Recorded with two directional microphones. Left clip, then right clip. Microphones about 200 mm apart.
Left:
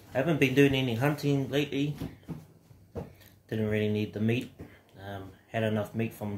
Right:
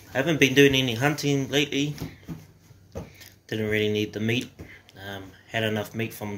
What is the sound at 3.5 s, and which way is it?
Speech, 5° left (ahead or behind).